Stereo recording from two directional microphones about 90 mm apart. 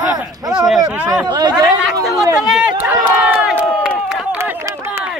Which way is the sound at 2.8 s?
20° right (ahead or behind).